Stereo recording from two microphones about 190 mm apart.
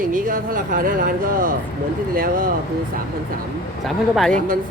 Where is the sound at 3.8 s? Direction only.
Centre (ahead or behind).